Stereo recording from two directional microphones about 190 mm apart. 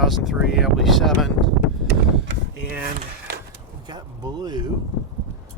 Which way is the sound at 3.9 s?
20° right (ahead or behind).